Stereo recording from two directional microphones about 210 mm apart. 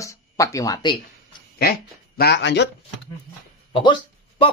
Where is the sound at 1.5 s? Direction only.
45° left (ahead or behind).